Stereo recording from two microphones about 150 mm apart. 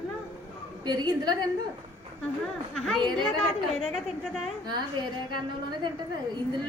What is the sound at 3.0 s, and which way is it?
Speech, 30° right (ahead or behind).